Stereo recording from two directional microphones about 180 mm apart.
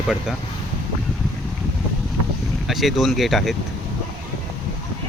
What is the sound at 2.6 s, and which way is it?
Speech, centre (ahead or behind).